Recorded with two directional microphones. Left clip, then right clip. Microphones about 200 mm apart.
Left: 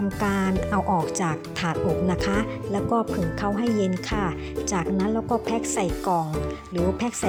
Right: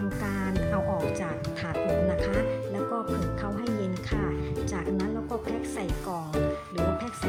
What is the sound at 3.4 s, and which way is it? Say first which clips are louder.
Speech: left 7 dB; 35° left (ahead or behind).